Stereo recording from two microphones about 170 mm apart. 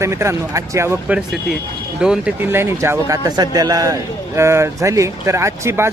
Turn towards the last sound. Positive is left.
turn(degrees=-15)  # may be behind; listen again after turning